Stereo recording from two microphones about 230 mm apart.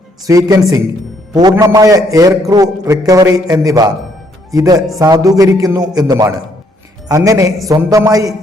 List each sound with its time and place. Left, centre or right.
0.3 s a man's voice: centre